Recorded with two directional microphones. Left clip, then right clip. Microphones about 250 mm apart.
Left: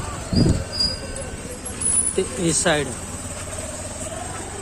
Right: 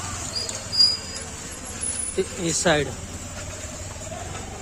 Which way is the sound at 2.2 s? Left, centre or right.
Centre.